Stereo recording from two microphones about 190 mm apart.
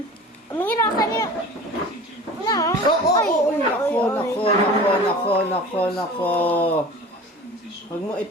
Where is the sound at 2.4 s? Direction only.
20° left (ahead or behind).